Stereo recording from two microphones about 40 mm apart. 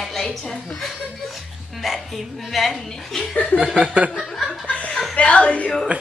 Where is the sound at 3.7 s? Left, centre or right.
Right.